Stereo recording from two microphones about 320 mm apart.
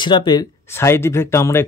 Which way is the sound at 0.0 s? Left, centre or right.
Centre.